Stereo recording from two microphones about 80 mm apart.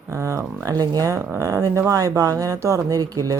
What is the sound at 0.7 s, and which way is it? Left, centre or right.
Speech, right.